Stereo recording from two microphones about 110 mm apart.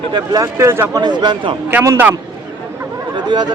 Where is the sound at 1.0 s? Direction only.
40° right (ahead or behind).